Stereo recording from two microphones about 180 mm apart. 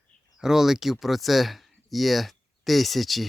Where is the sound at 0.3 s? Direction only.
5° right (ahead or behind).